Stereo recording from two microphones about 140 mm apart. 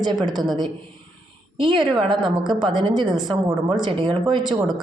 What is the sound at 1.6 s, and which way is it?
A woman's voice, 35° right (ahead or behind).